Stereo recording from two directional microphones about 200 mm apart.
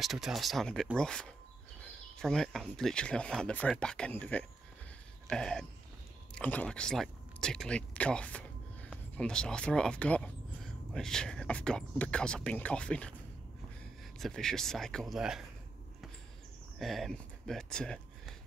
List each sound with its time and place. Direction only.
0.0 s speech: centre (ahead or behind)
14.1 s speech: centre (ahead or behind)
16.7 s speech: centre (ahead or behind)